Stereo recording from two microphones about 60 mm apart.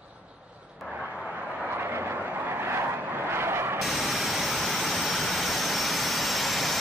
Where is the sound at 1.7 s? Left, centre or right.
Right.